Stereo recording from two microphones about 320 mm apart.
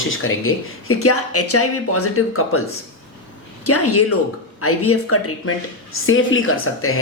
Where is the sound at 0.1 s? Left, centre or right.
Left.